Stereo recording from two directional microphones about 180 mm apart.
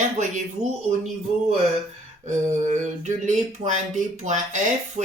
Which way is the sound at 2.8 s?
40° right (ahead or behind).